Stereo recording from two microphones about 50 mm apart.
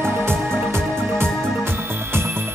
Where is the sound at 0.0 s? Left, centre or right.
Right.